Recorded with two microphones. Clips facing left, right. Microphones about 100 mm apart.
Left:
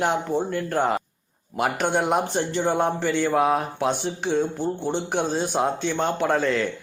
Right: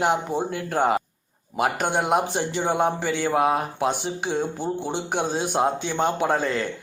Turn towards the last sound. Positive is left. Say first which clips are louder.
# left 1 dB
turn(degrees=-5)  # may be behind; listen again after turning